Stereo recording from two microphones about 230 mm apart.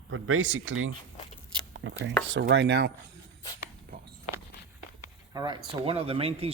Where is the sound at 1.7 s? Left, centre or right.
Right.